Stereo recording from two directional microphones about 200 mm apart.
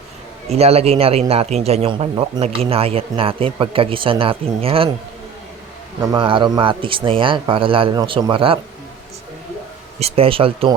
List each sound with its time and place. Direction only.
0.4 s a man's voice: 30° right (ahead or behind)
6.0 s speech: 20° right (ahead or behind)
10.0 s speech: 30° right (ahead or behind)